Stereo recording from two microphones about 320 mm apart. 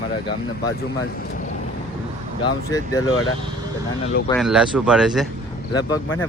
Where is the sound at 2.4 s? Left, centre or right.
Centre.